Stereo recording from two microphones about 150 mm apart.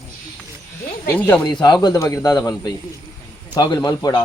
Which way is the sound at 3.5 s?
25° left (ahead or behind).